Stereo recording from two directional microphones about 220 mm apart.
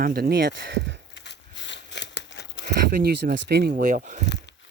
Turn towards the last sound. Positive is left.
turn(degrees=-35)  # may be behind; listen again after turning